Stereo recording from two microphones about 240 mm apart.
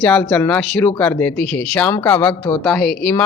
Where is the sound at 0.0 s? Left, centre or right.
Centre.